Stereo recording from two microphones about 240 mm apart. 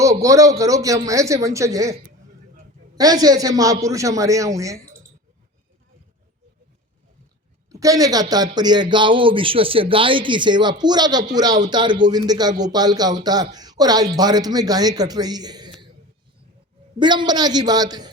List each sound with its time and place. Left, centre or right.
0.0 s a man's voice: centre
7.7 s speech: centre
17.0 s speech: centre